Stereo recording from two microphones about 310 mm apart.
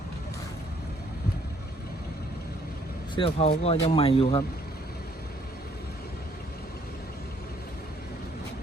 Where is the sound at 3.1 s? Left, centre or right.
Centre.